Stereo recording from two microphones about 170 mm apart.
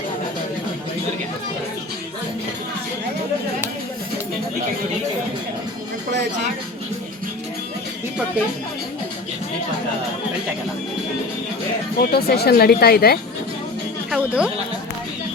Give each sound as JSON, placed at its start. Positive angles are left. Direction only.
{"t": 11.9, "sound": "speech", "side_deg": 65}
{"t": 14.1, "sound": "speech", "side_deg": -5}